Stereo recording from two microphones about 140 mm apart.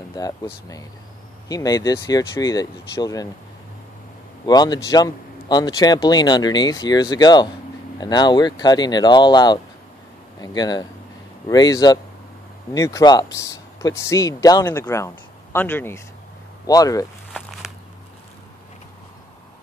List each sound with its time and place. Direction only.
0.2 s speech: 30° left (ahead or behind)
1.5 s speech: 25° left (ahead or behind)
4.5 s speech: 30° left (ahead or behind)